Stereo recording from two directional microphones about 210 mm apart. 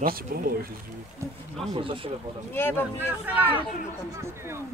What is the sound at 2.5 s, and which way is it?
Speech, 10° left (ahead or behind).